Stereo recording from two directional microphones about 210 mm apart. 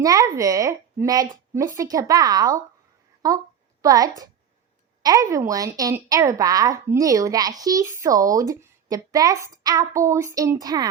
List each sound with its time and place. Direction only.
0.0 s a woman's voice: 15° right (ahead or behind)